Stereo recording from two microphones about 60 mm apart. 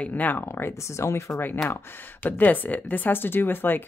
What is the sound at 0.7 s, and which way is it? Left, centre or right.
Speech, left.